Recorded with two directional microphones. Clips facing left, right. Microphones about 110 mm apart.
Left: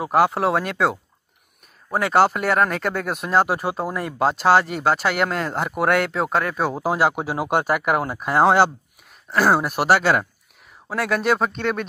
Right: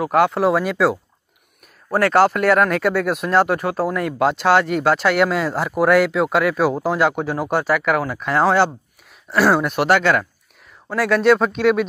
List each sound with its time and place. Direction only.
0.1 s speech: centre (ahead or behind)
7.5 s speech: 45° left (ahead or behind)
8.2 s speech: 15° left (ahead or behind)
9.3 s speech: centre (ahead or behind)